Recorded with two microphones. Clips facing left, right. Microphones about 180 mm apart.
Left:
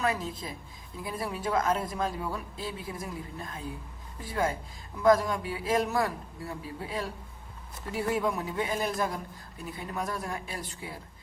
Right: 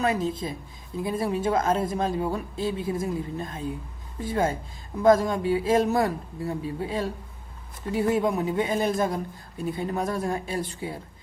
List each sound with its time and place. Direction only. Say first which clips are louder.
0.0 s speech: right 6 dB; 25° right (ahead or behind)